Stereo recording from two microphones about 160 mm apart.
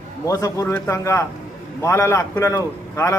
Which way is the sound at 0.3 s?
20° left (ahead or behind).